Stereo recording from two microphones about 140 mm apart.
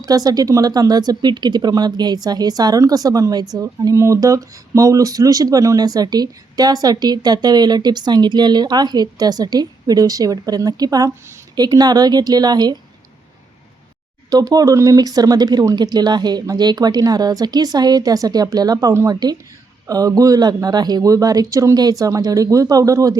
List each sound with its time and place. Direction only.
0.0 s speech: 25° right (ahead or behind)
14.3 s speech: 25° right (ahead or behind)